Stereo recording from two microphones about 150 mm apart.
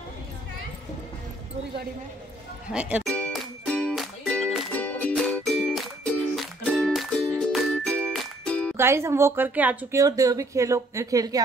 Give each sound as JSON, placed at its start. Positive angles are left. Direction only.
{"t": 2.7, "sound": "a woman's voice", "side_deg": -5}
{"t": 3.1, "sound": "music", "side_deg": 10}
{"t": 8.7, "sound": "a woman's voice", "side_deg": -15}
{"t": 9.9, "sound": "a woman's voice", "side_deg": -25}